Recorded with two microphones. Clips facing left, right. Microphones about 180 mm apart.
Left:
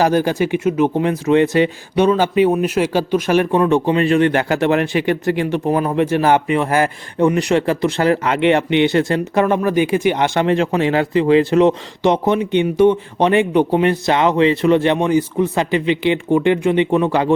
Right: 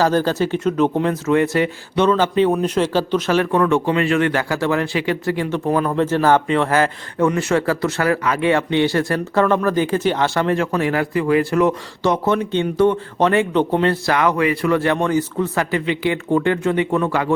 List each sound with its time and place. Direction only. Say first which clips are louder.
0.0 s speech: left 2 dB; 15° left (ahead or behind)
3.5 s speech: left 2 dB; 25° left (ahead or behind)